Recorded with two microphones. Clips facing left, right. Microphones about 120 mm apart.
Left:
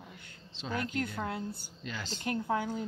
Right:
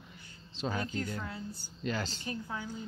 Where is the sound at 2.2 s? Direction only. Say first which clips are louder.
Left 7 dB; 70° left (ahead or behind).